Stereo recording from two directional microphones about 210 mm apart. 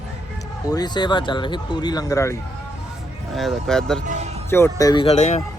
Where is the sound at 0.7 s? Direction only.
20° left (ahead or behind).